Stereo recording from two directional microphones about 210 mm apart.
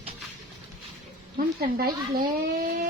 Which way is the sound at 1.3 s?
45° right (ahead or behind).